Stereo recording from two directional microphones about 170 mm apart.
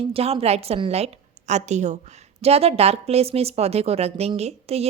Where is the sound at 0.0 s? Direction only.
35° right (ahead or behind).